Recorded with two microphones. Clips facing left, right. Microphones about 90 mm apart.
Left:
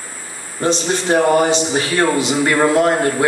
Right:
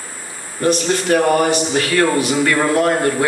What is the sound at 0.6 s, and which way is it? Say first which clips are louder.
A man's voice: right 1 dB; 25° left (ahead or behind).